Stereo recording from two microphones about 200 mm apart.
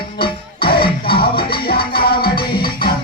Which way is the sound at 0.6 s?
50° left (ahead or behind).